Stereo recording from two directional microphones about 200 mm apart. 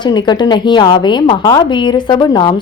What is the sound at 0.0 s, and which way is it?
A woman's voice, 20° left (ahead or behind).